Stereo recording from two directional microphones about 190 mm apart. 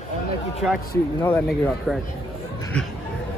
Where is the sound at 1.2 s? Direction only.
10° left (ahead or behind).